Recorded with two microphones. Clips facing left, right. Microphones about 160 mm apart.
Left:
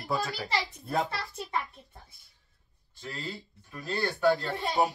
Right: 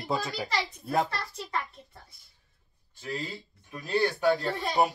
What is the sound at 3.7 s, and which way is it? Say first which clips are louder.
A child's voice: right 5 dB; 20° right (ahead or behind).